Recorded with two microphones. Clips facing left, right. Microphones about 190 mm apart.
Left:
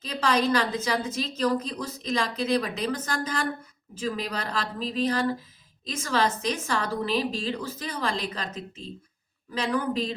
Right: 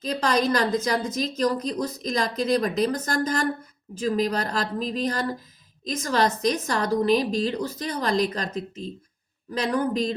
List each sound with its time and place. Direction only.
0.0 s a woman's voice: 40° right (ahead or behind)
9.6 s a woman's voice: 40° right (ahead or behind)